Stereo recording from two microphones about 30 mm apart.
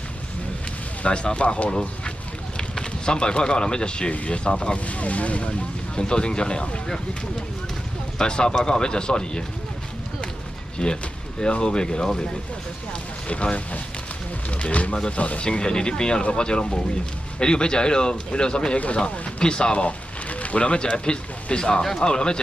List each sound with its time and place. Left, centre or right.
1.0 s speech: left
2.5 s speech: left
4.7 s speech: left
5.9 s speech: left
8.2 s speech: left
10.8 s speech: left
11.6 s speech: left
13.3 s speech: left
15.4 s speech: left
20.2 s speech: left